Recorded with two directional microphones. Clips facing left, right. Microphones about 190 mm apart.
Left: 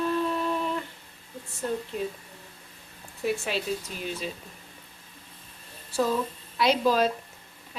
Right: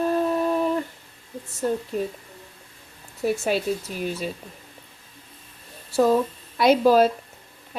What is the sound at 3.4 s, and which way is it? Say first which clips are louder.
Speech: right 6 dB; 45° right (ahead or behind).